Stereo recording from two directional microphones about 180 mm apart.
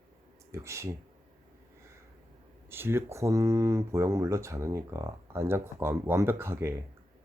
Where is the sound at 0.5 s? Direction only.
15° right (ahead or behind).